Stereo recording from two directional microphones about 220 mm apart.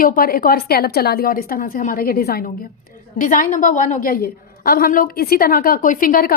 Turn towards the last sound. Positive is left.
turn(degrees=40)  # may be behind; listen again after turning